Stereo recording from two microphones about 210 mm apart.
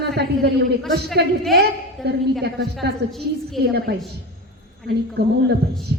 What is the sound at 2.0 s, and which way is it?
Speech, centre (ahead or behind).